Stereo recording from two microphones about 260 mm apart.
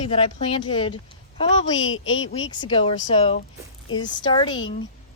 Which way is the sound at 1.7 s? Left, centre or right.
Left.